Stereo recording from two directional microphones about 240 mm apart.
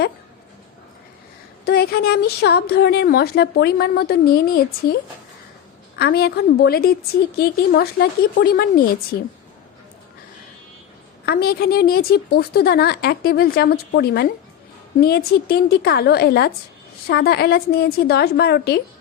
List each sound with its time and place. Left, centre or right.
1.6 s a woman's voice: left
6.0 s a woman's voice: left
11.3 s a woman's voice: left